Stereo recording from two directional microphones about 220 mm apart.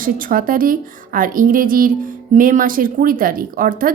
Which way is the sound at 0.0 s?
40° right (ahead or behind).